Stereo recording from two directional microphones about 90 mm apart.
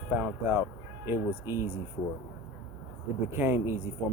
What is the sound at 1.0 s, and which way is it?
Speech, 30° right (ahead or behind).